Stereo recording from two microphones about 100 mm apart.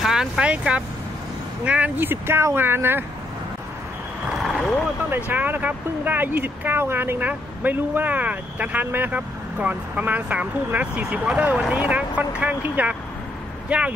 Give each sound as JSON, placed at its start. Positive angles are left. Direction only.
{"t": 0.0, "sound": "speech", "side_deg": -5}
{"t": 5.1, "sound": "speech", "side_deg": -20}